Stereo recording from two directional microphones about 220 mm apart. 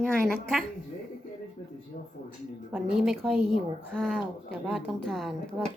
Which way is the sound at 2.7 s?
Centre (ahead or behind).